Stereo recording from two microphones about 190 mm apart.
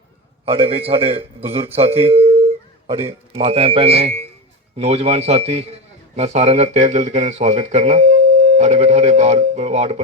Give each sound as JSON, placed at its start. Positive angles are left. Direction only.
{"t": 0.4, "sound": "speech", "side_deg": -30}